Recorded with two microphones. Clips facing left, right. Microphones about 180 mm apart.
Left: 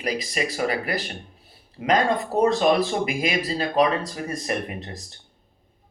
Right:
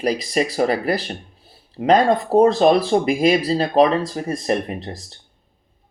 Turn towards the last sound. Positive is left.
turn(degrees=-35)  # may be behind; listen again after turning